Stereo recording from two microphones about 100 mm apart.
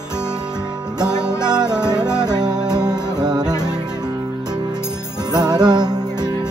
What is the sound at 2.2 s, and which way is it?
Music, 45° right (ahead or behind).